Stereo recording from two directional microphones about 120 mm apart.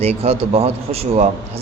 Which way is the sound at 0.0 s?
60° right (ahead or behind).